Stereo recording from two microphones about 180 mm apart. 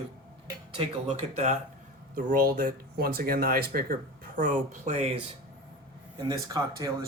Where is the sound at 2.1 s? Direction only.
50° right (ahead or behind).